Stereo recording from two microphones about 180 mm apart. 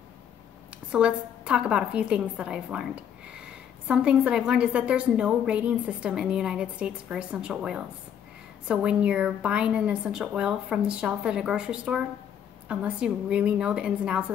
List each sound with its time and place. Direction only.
0.9 s a woman's voice: 5° right (ahead or behind)